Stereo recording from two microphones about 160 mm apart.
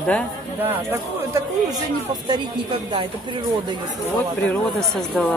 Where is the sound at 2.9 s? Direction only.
30° right (ahead or behind).